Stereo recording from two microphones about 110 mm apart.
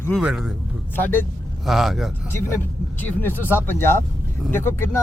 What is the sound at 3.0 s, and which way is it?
Speech, 20° left (ahead or behind).